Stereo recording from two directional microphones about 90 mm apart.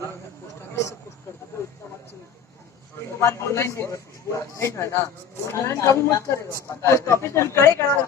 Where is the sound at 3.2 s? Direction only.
30° left (ahead or behind).